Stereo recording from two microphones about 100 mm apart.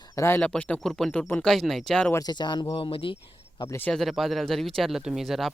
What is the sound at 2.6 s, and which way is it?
Speech, 70° left (ahead or behind).